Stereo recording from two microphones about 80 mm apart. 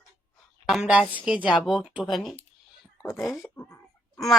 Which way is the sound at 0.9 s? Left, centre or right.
Centre.